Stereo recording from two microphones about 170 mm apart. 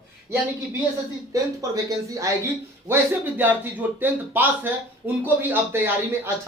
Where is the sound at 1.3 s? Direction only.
20° right (ahead or behind).